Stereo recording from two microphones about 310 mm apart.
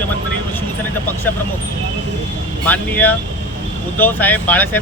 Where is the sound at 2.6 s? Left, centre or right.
Centre.